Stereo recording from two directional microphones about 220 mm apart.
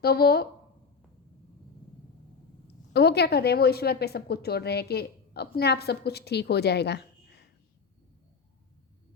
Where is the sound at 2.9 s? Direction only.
45° left (ahead or behind).